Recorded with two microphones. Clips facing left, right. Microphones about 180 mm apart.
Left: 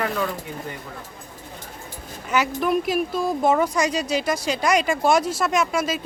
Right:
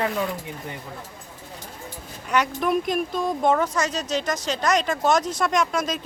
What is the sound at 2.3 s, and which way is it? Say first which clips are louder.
Speech: left 1 dB; 5° left (ahead or behind).